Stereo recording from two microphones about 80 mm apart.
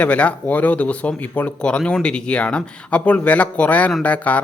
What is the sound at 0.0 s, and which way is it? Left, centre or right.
A man's voice, centre.